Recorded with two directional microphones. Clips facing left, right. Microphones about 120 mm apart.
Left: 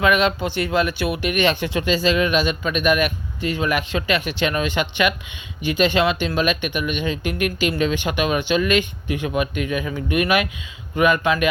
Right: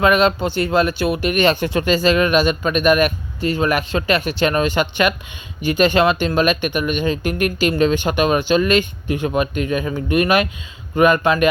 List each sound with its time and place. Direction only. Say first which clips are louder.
0.0 s speech: right 3 dB; 35° right (ahead or behind)